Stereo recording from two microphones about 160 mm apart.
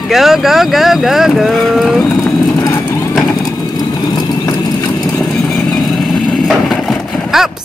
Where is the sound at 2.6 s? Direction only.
25° left (ahead or behind).